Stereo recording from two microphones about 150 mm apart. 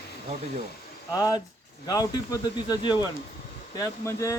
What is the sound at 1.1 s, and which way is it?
Speech, 25° left (ahead or behind).